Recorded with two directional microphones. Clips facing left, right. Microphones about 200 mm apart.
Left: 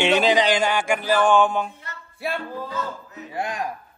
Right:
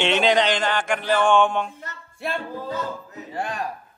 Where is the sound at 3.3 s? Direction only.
10° left (ahead or behind).